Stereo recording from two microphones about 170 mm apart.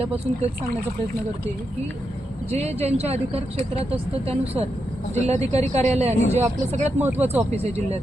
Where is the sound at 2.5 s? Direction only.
40° right (ahead or behind).